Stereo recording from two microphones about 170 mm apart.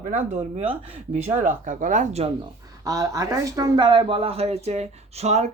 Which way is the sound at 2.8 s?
20° right (ahead or behind).